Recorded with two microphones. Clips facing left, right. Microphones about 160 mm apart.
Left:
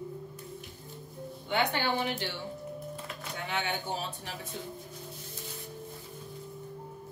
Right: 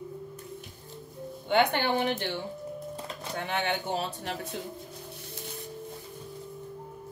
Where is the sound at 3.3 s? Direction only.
55° right (ahead or behind).